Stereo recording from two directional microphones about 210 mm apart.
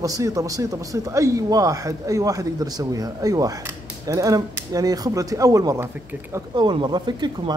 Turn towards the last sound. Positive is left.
turn(degrees=-20)  # may be behind; listen again after turning